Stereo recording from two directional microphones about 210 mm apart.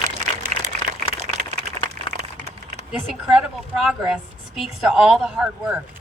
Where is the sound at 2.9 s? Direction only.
5° right (ahead or behind).